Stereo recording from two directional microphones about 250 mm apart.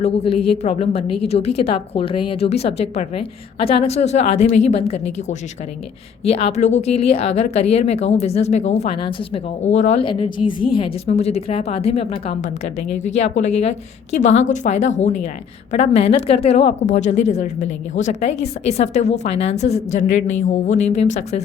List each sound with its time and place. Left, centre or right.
0.6 s speech: left